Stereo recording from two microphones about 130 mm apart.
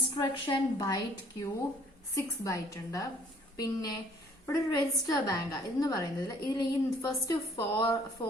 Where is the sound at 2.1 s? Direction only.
25° left (ahead or behind).